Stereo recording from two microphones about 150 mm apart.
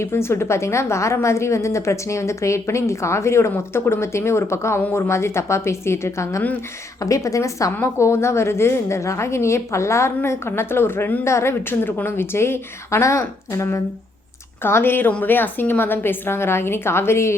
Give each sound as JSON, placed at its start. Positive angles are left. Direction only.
{"t": 0.0, "sound": "a woman's voice", "side_deg": 15}